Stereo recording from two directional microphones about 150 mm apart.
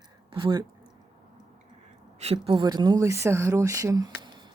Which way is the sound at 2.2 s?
40° right (ahead or behind).